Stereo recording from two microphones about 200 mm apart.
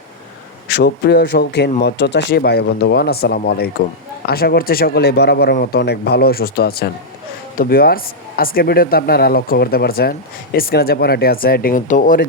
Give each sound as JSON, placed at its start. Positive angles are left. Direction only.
{"t": 0.8, "sound": "speech", "side_deg": 55}